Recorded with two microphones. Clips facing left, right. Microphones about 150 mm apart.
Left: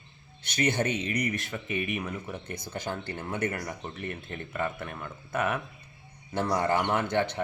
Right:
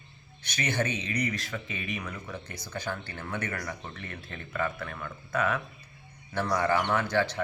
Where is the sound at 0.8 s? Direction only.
20° left (ahead or behind).